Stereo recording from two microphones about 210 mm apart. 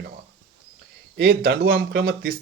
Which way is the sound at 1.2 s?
45° right (ahead or behind).